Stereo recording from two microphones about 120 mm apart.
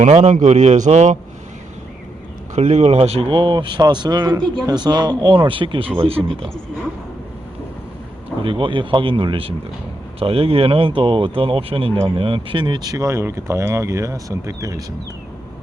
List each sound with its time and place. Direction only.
0.0 s a man's voice: 70° right (ahead or behind)
2.6 s speech: 65° right (ahead or behind)
8.4 s speech: 45° right (ahead or behind); by 14.8 s 30° right (ahead or behind)